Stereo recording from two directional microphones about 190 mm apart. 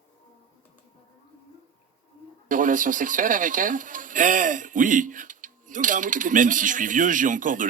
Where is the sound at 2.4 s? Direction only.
45° right (ahead or behind).